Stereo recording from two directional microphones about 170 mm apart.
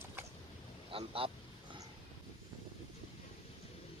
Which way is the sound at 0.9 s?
30° right (ahead or behind).